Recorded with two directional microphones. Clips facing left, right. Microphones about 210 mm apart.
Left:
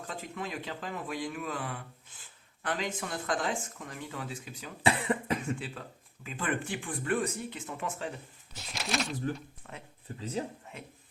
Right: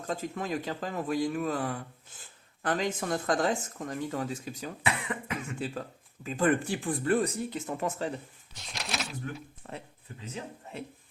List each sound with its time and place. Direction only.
0.1 s speech: 45° right (ahead or behind)
4.8 s cough: 30° left (ahead or behind)
5.5 s speech: 40° right (ahead or behind)
8.5 s speech: centre (ahead or behind)
9.6 s speech: 35° right (ahead or behind)
10.1 s speech: 35° left (ahead or behind)